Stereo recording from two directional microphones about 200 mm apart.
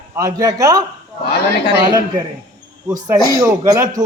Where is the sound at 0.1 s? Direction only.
15° right (ahead or behind).